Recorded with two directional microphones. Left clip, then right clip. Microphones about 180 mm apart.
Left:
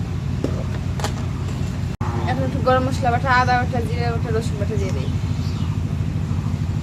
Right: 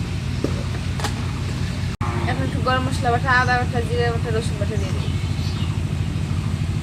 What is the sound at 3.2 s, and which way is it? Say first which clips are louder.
Speech: left 1 dB; 30° left (ahead or behind).